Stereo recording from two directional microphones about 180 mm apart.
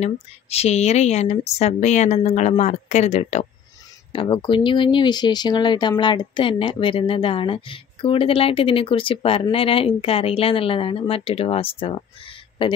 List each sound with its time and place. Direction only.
0.0 s speech: 35° left (ahead or behind)
4.1 s speech: 30° left (ahead or behind)